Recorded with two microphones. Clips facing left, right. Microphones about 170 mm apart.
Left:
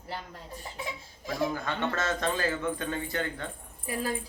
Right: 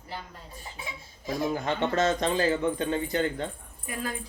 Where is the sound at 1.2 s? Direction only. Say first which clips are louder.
Right 2 dB; 20° right (ahead or behind).